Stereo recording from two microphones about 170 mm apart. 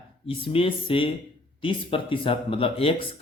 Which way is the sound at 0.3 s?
30° left (ahead or behind).